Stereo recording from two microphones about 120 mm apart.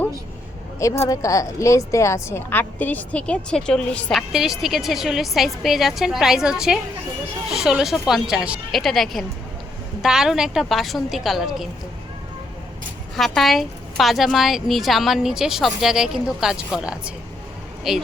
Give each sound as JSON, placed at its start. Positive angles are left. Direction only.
{"t": 0.8, "sound": "a woman's voice", "side_deg": 25}
{"t": 13.1, "sound": "a woman's voice", "side_deg": 0}